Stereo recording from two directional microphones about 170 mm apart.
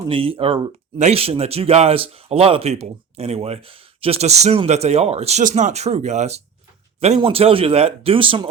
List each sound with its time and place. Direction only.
0.1 s speech: 35° right (ahead or behind)